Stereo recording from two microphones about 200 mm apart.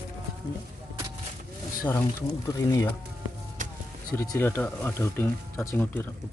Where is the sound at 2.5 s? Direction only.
15° left (ahead or behind).